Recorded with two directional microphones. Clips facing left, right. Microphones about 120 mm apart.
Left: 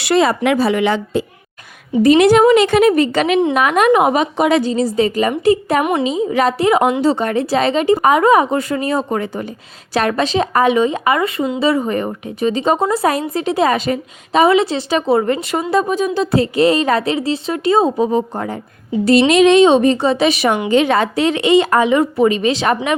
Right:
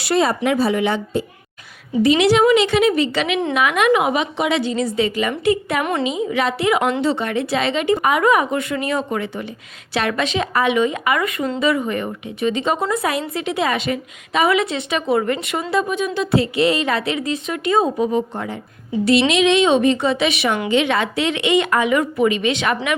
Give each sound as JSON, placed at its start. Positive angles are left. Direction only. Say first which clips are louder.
{"t": 0.0, "sound": "speech", "louder": "left 4 dB", "side_deg": 90}
{"t": 2.0, "sound": "a woman's voice", "louder": "left 5 dB", "side_deg": 50}